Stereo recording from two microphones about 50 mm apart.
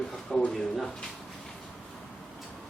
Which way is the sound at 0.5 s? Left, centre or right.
Centre.